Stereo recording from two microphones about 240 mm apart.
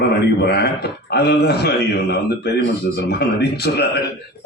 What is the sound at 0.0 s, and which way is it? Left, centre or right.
A man's voice, left.